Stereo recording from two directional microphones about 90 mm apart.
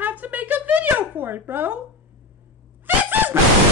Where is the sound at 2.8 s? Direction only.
20° right (ahead or behind).